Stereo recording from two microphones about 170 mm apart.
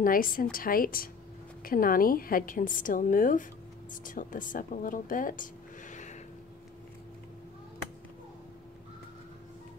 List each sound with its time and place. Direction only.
0.0 s a woman's voice: 55° left (ahead or behind)